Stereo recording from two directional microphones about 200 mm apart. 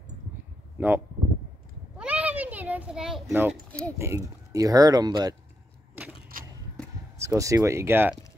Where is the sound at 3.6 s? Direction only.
5° left (ahead or behind).